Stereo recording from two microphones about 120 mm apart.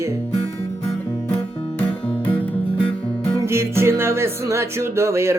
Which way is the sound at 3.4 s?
20° right (ahead or behind).